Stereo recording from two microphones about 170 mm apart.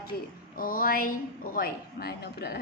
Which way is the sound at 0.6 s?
55° left (ahead or behind).